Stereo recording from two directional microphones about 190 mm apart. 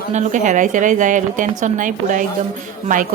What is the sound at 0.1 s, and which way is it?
Speech, 40° right (ahead or behind).